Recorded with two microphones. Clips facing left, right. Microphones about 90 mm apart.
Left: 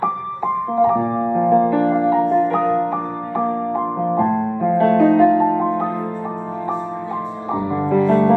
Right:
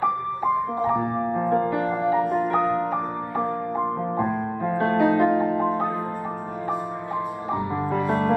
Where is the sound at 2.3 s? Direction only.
10° right (ahead or behind).